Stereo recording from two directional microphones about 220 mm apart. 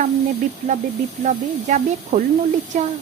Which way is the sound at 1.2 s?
35° right (ahead or behind).